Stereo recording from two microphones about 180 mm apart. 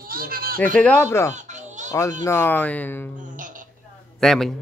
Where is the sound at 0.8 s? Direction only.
15° left (ahead or behind).